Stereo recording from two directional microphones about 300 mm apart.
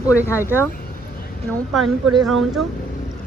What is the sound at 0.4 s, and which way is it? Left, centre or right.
Speech, centre.